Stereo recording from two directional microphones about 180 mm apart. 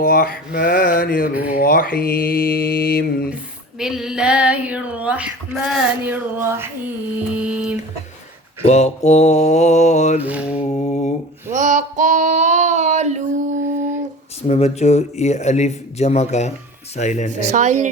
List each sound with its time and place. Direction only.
0.0 s mantra: 55° left (ahead or behind)
1.3 s speech: 10° right (ahead or behind)
1.5 s mantra: 55° left (ahead or behind)
3.8 s speech: 5° right (ahead or behind)
8.6 s speech: 35° left (ahead or behind)
10.2 s speech: 10° right (ahead or behind)
10.8 s speech: 40° left (ahead or behind)
11.5 s female singing: 45° right (ahead or behind)
14.4 s speech: 35° left (ahead or behind)
17.4 s speech: 40° right (ahead or behind)